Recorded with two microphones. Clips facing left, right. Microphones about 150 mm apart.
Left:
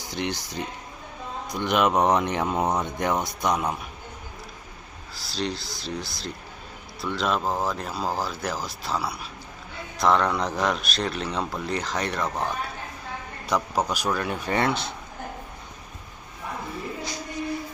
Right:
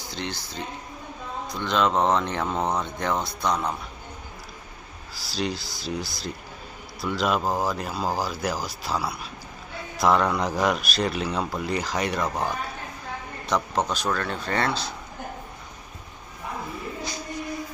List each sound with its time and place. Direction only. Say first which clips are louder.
0.0 s speech: left 3 dB; 15° left (ahead or behind)
5.1 s speech: right 1 dB; centre (ahead or behind); by 14.9 s 20° left (ahead or behind)